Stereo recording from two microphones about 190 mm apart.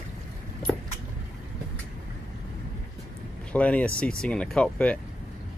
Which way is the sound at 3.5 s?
5° left (ahead or behind).